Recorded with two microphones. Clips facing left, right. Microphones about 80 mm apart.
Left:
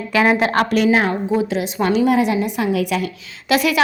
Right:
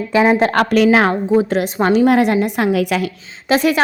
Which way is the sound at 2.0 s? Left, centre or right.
Right.